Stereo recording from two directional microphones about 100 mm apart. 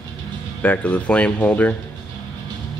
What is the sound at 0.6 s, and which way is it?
Speech, 15° left (ahead or behind).